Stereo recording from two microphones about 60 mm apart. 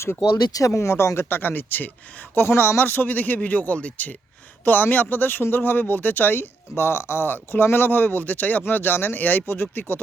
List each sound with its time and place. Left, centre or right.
0.7 s a man's voice: left